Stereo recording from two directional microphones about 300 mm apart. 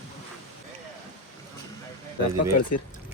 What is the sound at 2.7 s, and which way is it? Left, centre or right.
Speech, left.